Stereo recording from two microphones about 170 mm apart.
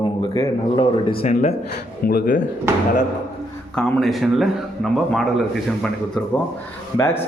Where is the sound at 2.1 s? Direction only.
60° left (ahead or behind).